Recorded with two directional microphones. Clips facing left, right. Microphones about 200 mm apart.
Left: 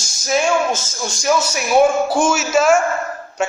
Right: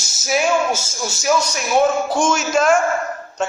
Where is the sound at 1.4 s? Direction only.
5° left (ahead or behind).